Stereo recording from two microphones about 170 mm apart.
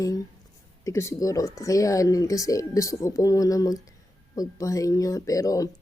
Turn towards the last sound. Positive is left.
turn(degrees=20)  # may be behind; listen again after turning